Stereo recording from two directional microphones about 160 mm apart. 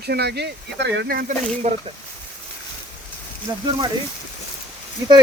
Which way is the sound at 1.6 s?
45° right (ahead or behind).